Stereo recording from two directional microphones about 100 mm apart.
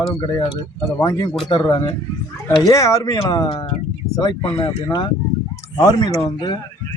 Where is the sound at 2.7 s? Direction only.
35° left (ahead or behind).